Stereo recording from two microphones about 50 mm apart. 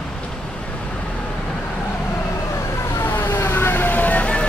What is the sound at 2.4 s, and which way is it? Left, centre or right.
Vehicle, left.